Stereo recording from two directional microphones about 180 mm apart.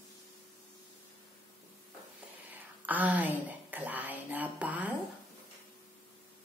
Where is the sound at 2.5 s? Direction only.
10° right (ahead or behind).